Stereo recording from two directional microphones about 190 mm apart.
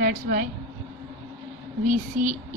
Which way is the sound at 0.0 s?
45° right (ahead or behind).